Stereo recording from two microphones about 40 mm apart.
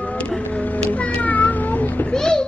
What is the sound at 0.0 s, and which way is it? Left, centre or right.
Music, left.